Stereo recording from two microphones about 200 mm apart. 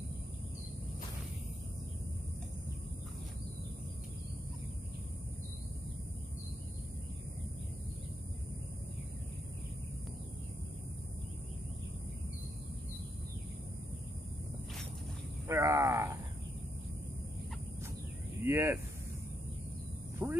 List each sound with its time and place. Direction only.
15.4 s speech: 15° right (ahead or behind)
18.4 s speech: 10° right (ahead or behind)
20.2 s a sound: 5° right (ahead or behind)